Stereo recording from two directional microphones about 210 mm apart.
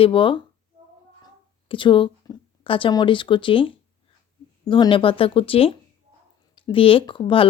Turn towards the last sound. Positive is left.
turn(degrees=25)  # may be behind; listen again after turning